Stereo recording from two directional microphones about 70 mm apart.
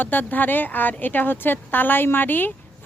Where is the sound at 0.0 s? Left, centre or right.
Left.